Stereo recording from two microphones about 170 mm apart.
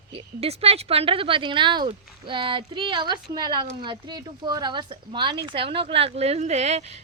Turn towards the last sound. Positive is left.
turn(degrees=-40)  # may be behind; listen again after turning